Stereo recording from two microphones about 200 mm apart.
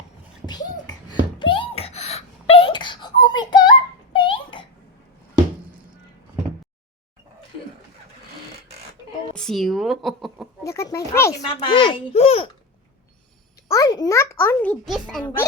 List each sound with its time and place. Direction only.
0.4 s a sound: 20° left (ahead or behind)
1.4 s wail: 25° left (ahead or behind)
9.3 s speech: 5° left (ahead or behind)
10.7 s a sound: 15° left (ahead or behind)
11.4 s a child's voice: 25° left (ahead or behind)
13.7 s a child's voice: 20° left (ahead or behind); by 15.3 s 5° left (ahead or behind)